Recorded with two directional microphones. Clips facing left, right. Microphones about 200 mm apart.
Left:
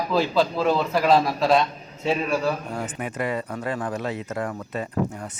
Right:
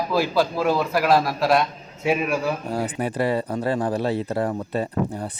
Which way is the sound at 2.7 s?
35° right (ahead or behind).